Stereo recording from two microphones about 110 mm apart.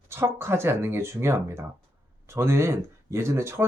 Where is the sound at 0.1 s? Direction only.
20° right (ahead or behind).